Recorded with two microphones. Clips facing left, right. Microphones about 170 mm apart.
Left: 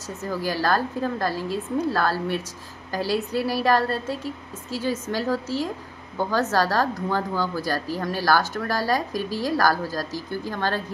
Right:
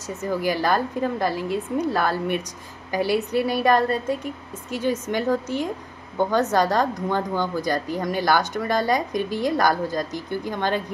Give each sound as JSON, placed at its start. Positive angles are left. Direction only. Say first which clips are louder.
{"t": 0.2, "sound": "a woman's voice", "louder": "right 2 dB", "side_deg": -20}
{"t": 4.6, "sound": "a woman's voice", "louder": "right 2 dB", "side_deg": -20}